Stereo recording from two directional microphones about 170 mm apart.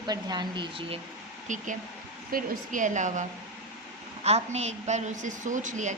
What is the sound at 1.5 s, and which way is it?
A woman's voice, 45° right (ahead or behind).